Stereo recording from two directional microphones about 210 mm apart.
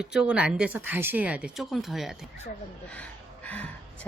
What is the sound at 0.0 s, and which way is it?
Speech, 5° right (ahead or behind).